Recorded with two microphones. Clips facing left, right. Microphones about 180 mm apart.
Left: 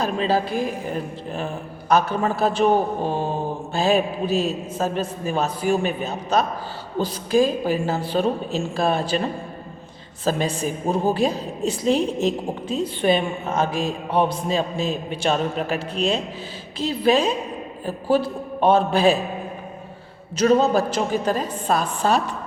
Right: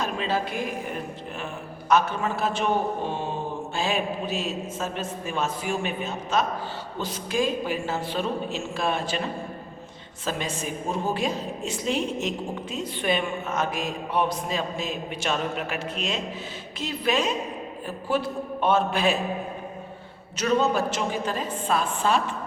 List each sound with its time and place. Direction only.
0.0 s a woman's voice: 35° left (ahead or behind)
10.2 s a woman's voice: 35° left (ahead or behind)
20.3 s a woman's voice: 35° left (ahead or behind)